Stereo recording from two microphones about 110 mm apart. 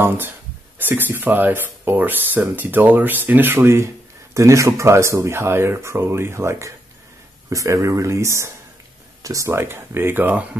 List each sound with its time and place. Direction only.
0.7 s speech: 15° right (ahead or behind)